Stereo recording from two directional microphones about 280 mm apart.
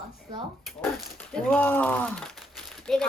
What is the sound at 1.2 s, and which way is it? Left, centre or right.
Speech, centre.